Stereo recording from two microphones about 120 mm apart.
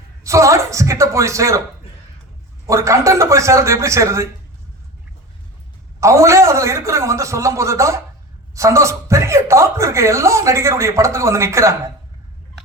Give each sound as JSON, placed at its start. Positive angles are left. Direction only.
{"t": 0.3, "sound": "speech", "side_deg": -25}
{"t": 2.6, "sound": "speech", "side_deg": -25}
{"t": 6.0, "sound": "speech", "side_deg": -25}